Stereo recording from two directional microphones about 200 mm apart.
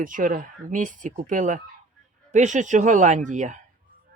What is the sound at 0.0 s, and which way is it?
Speech, 40° right (ahead or behind).